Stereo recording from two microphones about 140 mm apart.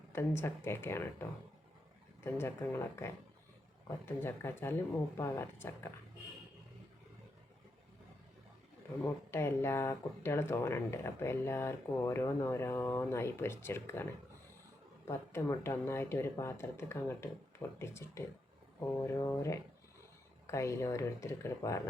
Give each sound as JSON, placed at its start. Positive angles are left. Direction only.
{"t": 0.1, "sound": "speech", "side_deg": 15}
{"t": 2.2, "sound": "speech", "side_deg": 15}
{"t": 9.0, "sound": "speech", "side_deg": 20}